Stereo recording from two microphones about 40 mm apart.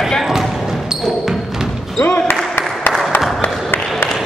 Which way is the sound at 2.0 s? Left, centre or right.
Left.